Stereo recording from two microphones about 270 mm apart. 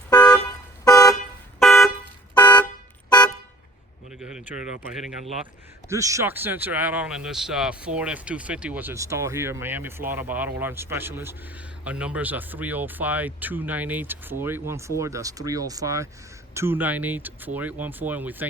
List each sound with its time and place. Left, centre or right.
0.1 s car alarm: centre
0.9 s toot: centre
1.5 s vehicle horn: centre
2.3 s vehicle horn: centre
4.2 s speech: centre
5.9 s speech: centre